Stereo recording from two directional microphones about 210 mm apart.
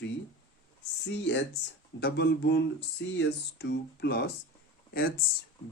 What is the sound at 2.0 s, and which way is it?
Speech, 55° left (ahead or behind).